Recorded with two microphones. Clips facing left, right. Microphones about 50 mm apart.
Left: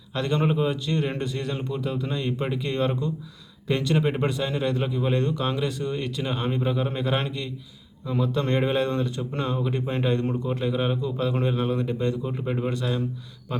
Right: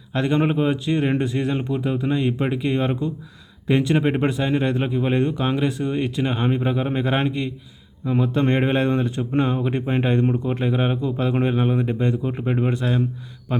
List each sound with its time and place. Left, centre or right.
0.1 s speech: right